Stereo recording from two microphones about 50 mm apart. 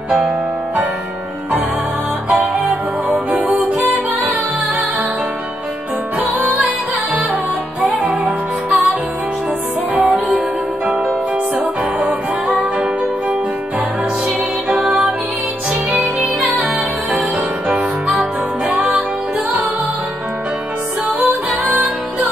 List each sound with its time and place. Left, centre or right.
2.4 s music: right
6.1 s music: right
7.8 s music: right
9.9 s music: right
12.1 s music: right
15.9 s music: right
17.6 s music: right